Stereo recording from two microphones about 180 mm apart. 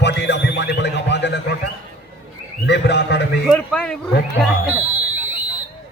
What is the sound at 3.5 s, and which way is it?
Speech, 5° left (ahead or behind).